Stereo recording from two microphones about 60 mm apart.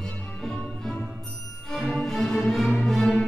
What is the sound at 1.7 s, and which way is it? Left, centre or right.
Music, centre.